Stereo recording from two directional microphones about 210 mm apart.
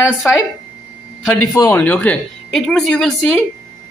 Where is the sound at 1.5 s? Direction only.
15° left (ahead or behind).